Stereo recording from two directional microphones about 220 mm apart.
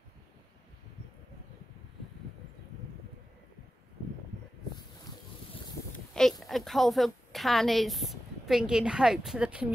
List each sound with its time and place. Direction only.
6.4 s a woman's voice: centre (ahead or behind)